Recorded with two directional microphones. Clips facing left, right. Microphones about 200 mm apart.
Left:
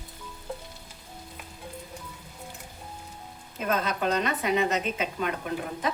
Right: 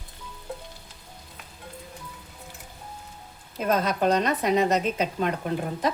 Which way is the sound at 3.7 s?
40° right (ahead or behind).